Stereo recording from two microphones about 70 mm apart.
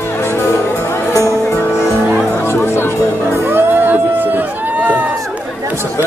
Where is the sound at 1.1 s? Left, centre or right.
Left.